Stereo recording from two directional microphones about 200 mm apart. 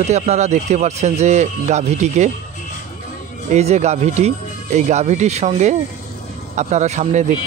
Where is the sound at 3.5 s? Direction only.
35° right (ahead or behind).